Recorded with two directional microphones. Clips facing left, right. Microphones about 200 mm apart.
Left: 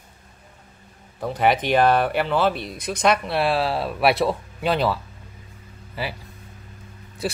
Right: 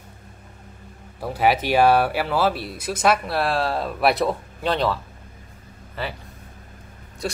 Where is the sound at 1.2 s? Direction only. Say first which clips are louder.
Even; 5° right (ahead or behind).